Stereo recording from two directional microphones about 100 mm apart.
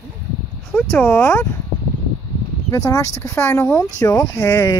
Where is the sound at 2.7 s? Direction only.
35° left (ahead or behind).